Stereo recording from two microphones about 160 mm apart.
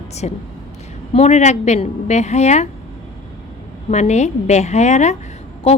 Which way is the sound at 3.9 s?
45° left (ahead or behind).